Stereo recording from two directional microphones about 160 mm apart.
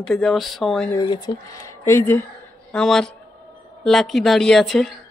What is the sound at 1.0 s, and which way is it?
Speech, 25° left (ahead or behind).